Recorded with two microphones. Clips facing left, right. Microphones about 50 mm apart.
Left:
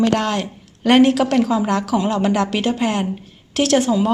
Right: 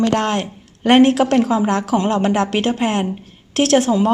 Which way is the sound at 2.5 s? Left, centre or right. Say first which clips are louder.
Right 1 dB; right.